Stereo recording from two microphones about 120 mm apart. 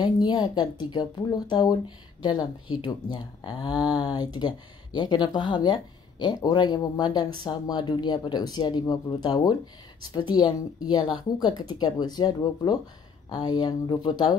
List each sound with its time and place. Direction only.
0.0 s speech: 35° left (ahead or behind)